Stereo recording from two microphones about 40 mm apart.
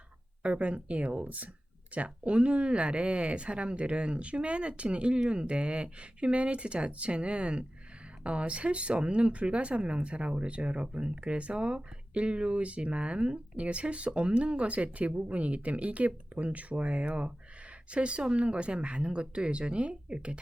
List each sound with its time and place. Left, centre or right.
0.4 s speech: right